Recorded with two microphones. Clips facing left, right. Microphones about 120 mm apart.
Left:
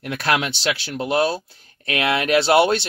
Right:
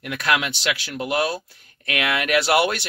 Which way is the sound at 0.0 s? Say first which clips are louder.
Left 1 dB; 30° left (ahead or behind).